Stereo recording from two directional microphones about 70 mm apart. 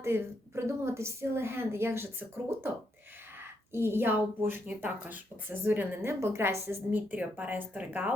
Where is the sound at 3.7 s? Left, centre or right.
Right.